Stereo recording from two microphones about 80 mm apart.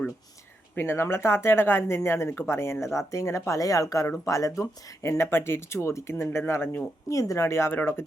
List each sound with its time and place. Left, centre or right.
0.8 s speech: left
7.1 s speech: left
7.7 s speech: left